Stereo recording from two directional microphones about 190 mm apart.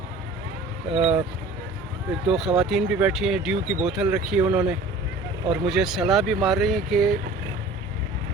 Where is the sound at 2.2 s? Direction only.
Centre (ahead or behind).